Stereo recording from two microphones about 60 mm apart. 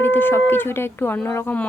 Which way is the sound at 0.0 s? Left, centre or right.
Left.